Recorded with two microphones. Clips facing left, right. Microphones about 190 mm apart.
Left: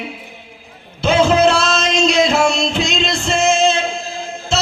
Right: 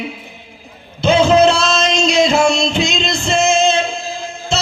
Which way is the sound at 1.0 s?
5° left (ahead or behind).